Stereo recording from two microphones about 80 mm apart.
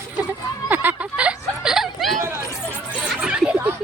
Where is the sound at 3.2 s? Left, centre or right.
Centre.